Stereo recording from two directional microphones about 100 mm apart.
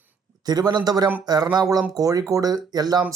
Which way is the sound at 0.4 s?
40° right (ahead or behind).